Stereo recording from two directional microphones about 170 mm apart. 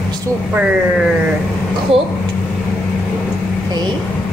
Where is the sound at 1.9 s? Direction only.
35° right (ahead or behind).